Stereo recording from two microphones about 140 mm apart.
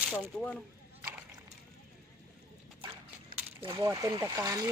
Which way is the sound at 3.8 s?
25° right (ahead or behind).